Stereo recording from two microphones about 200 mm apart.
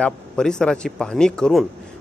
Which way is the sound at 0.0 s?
5° left (ahead or behind).